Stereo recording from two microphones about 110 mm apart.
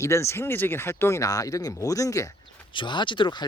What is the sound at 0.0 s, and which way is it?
Speech, 25° left (ahead or behind).